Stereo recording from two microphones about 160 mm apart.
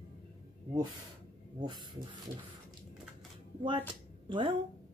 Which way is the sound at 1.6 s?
25° right (ahead or behind).